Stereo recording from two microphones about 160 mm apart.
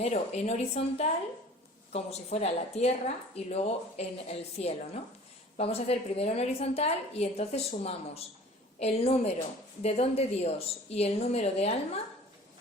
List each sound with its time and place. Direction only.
0.0 s a woman's voice: 40° left (ahead or behind)